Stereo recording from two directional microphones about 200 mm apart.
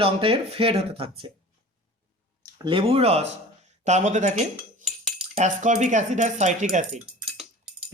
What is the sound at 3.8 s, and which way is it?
Cutlery, 35° right (ahead or behind).